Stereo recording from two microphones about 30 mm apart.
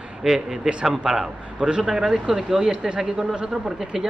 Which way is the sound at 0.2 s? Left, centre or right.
Centre.